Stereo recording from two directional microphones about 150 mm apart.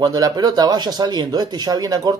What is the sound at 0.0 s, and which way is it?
Speech, 25° right (ahead or behind).